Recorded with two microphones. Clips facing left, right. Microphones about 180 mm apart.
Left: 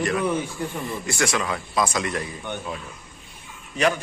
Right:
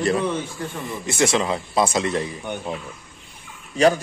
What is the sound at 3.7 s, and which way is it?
Speech, 35° right (ahead or behind).